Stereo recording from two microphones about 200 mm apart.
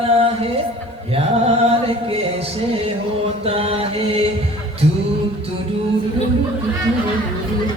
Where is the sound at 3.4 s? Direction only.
30° right (ahead or behind).